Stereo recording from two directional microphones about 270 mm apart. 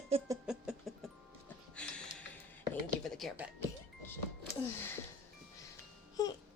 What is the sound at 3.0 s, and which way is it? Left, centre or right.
Speech, centre.